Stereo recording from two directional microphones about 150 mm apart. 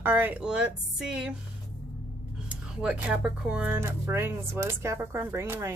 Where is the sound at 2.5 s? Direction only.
5° right (ahead or behind).